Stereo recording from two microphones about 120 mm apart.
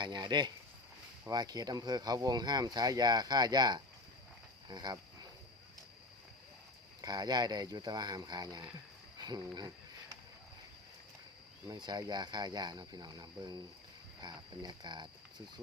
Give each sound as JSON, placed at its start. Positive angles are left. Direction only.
{"t": 0.0, "sound": "speech", "side_deg": -35}
{"t": 7.0, "sound": "speech", "side_deg": -35}
{"t": 9.1, "sound": "a sound", "side_deg": -35}
{"t": 11.7, "sound": "speech", "side_deg": -35}